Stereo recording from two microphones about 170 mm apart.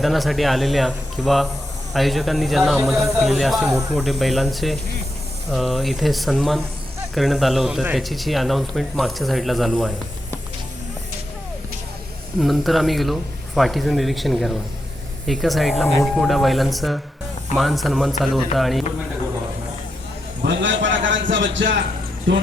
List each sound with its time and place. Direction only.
0.0 s speech: centre (ahead or behind)
12.4 s speech: centre (ahead or behind)
20.4 s a sound: 90° right
22.3 s speech: 90° right